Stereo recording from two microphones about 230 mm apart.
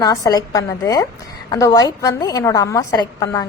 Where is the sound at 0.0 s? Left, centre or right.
Centre.